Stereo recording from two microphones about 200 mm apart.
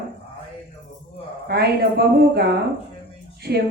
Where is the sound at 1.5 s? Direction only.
55° right (ahead or behind).